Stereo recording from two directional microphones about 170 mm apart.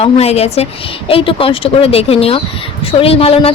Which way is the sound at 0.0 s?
40° left (ahead or behind).